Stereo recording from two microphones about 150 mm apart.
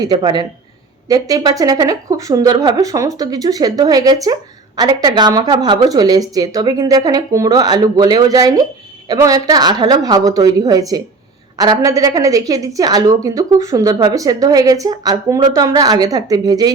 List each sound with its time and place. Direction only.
0.0 s a woman's voice: 25° right (ahead or behind)